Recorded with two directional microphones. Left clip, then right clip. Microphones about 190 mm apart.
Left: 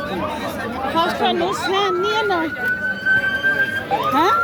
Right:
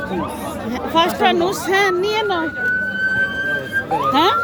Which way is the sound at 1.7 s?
10° right (ahead or behind).